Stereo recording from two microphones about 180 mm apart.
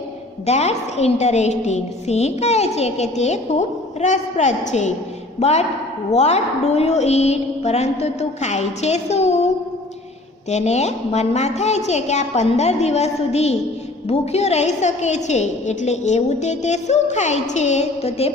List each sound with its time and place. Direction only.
0.4 s a woman's voice: 35° left (ahead or behind)
10.5 s a woman's voice: 40° left (ahead or behind)